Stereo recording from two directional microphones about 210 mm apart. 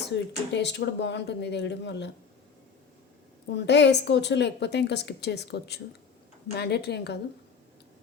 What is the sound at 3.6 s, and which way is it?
A woman's voice, 55° left (ahead or behind).